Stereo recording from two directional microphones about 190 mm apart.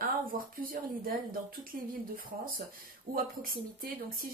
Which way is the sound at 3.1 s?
50° right (ahead or behind).